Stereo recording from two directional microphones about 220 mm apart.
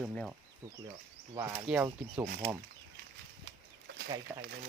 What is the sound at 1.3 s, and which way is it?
Speech, 10° right (ahead or behind).